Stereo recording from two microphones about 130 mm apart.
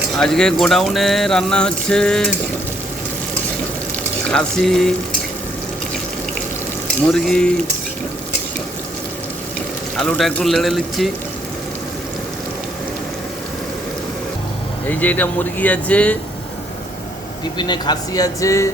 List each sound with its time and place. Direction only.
0.2 s speech: 5° left (ahead or behind)
4.3 s speech: 5° left (ahead or behind)
7.1 s speech: 5° left (ahead or behind)
10.0 s speech: 5° left (ahead or behind)
14.8 s speech: 10° left (ahead or behind)
17.4 s speech: 35° left (ahead or behind)